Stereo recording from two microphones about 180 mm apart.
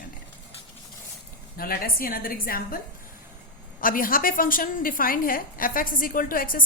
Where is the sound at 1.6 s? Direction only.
55° left (ahead or behind).